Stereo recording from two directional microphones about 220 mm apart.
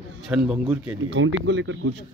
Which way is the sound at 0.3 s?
5° right (ahead or behind).